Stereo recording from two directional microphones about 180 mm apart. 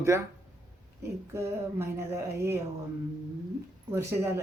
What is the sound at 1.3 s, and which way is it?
Speech, 15° right (ahead or behind).